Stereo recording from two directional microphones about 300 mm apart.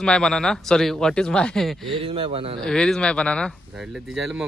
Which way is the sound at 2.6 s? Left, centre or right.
Centre.